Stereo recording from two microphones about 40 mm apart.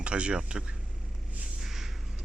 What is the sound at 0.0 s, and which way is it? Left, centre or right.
Speech, right.